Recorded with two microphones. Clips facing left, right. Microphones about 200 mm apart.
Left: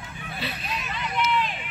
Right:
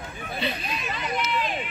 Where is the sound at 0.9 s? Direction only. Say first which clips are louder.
Left 2 dB; 40° right (ahead or behind).